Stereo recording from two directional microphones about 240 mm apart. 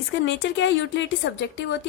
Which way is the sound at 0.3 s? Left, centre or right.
Left.